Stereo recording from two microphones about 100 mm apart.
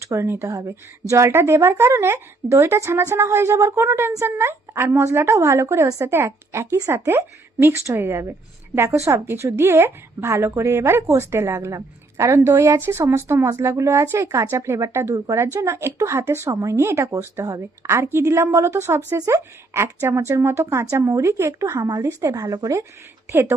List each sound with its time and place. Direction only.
0.0 s a woman's voice: 30° right (ahead or behind)
21.8 s a woman's voice: 40° right (ahead or behind); by 23.6 s 25° right (ahead or behind)